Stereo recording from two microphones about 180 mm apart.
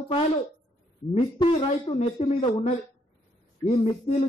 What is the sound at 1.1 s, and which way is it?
Speech, 30° left (ahead or behind).